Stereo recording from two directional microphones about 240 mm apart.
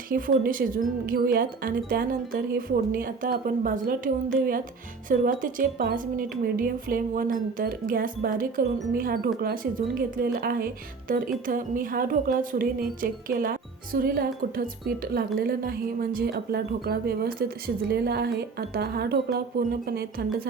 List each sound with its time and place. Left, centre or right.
0.1 s speech: right